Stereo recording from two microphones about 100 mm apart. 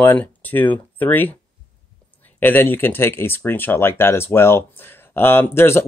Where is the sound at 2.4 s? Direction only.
20° left (ahead or behind).